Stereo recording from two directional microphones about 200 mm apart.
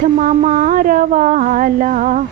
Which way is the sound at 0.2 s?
40° right (ahead or behind).